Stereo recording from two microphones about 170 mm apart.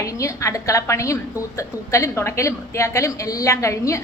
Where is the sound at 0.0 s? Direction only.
20° left (ahead or behind).